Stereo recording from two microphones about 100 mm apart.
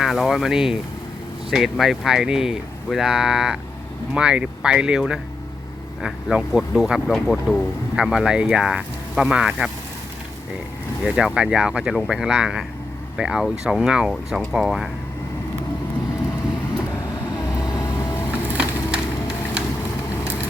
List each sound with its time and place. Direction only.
0.0 s speech: centre (ahead or behind)
11.0 s speech: 10° right (ahead or behind)
17.7 s vehicle: 40° left (ahead or behind)
18.3 s wood: 15° right (ahead or behind)